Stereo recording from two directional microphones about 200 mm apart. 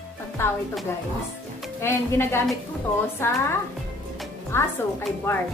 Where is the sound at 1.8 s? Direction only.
10° left (ahead or behind).